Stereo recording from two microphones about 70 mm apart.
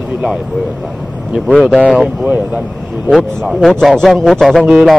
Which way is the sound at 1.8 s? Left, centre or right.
Centre.